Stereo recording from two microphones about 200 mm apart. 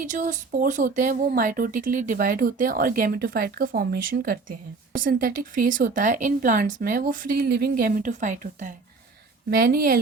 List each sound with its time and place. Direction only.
0.0 s speech: 40° right (ahead or behind)
9.5 s speech: 50° right (ahead or behind)